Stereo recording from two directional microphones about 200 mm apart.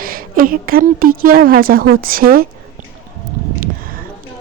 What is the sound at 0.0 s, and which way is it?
Speech, 45° right (ahead or behind).